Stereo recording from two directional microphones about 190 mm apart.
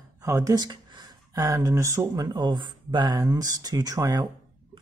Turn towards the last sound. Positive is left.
turn(degrees=-20)  # may be behind; listen again after turning